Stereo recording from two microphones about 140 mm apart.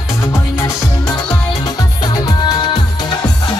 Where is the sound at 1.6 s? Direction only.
30° left (ahead or behind).